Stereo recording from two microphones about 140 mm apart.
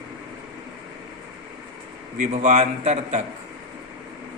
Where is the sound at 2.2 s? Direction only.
60° right (ahead or behind).